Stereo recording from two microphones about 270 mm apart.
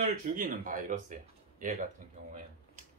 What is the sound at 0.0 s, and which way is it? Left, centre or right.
Speech, right.